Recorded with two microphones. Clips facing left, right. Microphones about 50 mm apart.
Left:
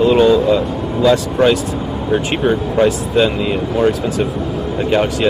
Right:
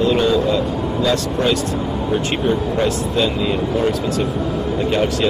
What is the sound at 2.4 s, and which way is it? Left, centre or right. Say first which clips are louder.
Speech: left 5 dB; centre.